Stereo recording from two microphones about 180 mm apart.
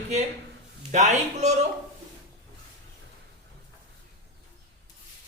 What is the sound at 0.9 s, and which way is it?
Speech, 40° right (ahead or behind).